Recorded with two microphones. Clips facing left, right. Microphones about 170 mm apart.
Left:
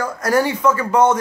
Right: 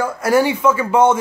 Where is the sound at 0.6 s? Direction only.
5° right (ahead or behind).